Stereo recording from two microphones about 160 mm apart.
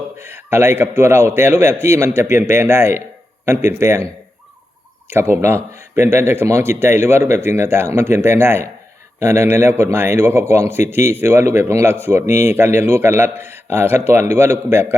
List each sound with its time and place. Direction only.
0.2 s a man's voice: 15° right (ahead or behind)
5.1 s a man's voice: 15° right (ahead or behind)